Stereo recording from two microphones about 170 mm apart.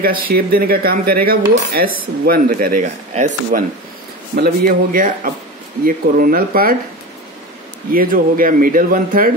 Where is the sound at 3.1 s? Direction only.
45° right (ahead or behind).